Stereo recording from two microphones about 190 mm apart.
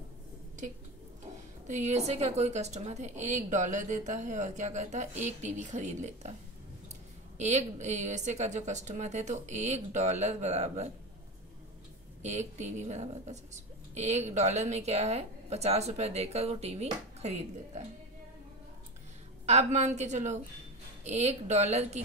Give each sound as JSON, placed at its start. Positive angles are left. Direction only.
{"t": 1.7, "sound": "a woman's voice", "side_deg": -35}
{"t": 7.3, "sound": "a woman's voice", "side_deg": -40}
{"t": 12.2, "sound": "a woman's voice", "side_deg": -40}
{"t": 19.4, "sound": "a woman's voice", "side_deg": -35}